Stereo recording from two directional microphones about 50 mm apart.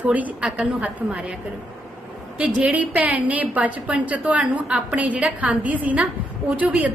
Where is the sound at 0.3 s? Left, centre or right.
Centre.